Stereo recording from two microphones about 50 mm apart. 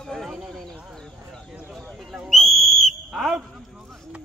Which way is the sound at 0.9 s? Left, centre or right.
Centre.